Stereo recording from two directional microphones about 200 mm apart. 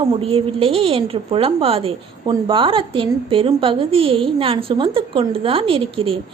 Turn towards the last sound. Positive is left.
turn(degrees=-25)  # may be behind; listen again after turning